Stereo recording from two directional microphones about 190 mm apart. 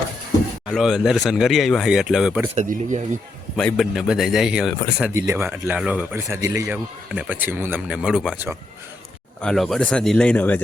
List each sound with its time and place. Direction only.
0.7 s speech: centre (ahead or behind)
2.6 s speech: 40° right (ahead or behind)
3.6 s speech: 5° left (ahead or behind)